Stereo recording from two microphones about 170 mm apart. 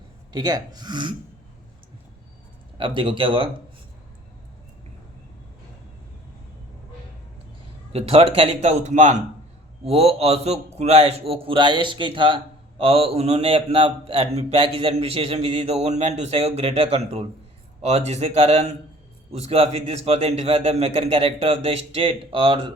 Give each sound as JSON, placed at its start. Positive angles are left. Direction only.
{"t": 0.3, "sound": "speech", "side_deg": -20}
{"t": 2.7, "sound": "speech", "side_deg": -30}
{"t": 7.9, "sound": "a man's voice", "side_deg": -35}